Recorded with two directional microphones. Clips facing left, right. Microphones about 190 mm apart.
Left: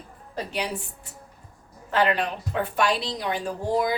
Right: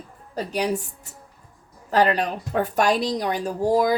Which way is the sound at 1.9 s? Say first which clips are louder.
Right 3 dB; 40° right (ahead or behind).